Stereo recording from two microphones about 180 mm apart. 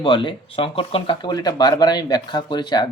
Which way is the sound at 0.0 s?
25° left (ahead or behind).